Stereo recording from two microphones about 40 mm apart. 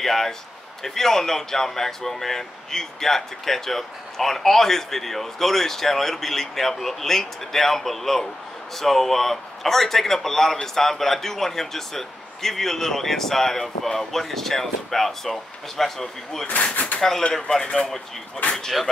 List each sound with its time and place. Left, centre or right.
0.0 s speech: centre
18.6 s speech: centre